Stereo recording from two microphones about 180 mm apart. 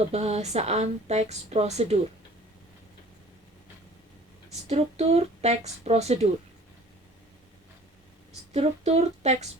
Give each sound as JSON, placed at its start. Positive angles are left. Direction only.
{"t": 0.1, "sound": "a woman's voice", "side_deg": -35}
{"t": 4.7, "sound": "a woman's voice", "side_deg": -35}
{"t": 8.5, "sound": "a woman's voice", "side_deg": -35}